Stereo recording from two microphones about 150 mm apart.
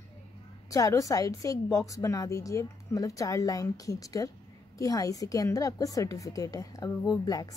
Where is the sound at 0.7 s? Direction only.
20° left (ahead or behind).